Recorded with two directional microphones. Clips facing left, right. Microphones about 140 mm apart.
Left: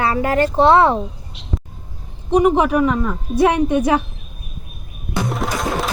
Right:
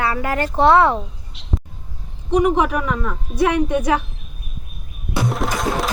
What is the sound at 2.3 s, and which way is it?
Speech, 30° left (ahead or behind).